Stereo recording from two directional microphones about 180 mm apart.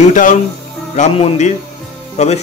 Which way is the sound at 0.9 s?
35° left (ahead or behind).